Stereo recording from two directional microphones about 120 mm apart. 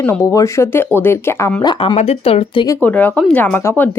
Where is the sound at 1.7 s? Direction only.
50° left (ahead or behind).